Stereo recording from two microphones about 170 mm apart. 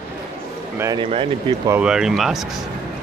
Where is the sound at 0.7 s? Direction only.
20° right (ahead or behind).